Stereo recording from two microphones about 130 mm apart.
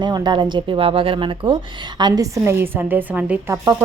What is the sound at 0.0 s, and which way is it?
Speech, 35° right (ahead or behind).